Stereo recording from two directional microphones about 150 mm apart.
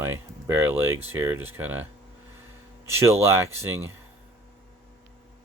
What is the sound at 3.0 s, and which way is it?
Speech, 20° right (ahead or behind).